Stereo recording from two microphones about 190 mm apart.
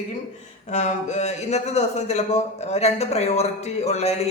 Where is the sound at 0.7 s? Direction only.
40° left (ahead or behind).